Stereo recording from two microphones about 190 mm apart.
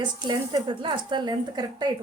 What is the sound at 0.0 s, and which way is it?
Speech, 25° right (ahead or behind).